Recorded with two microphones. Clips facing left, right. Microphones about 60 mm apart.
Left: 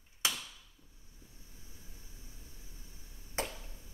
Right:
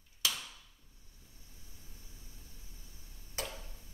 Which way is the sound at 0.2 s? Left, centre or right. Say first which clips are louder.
Left 1 dB; left.